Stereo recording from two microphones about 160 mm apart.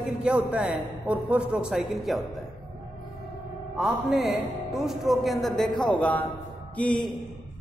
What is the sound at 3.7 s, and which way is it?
A man's voice, centre (ahead or behind).